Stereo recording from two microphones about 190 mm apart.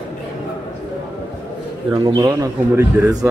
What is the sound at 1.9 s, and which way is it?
A man's voice, 20° right (ahead or behind).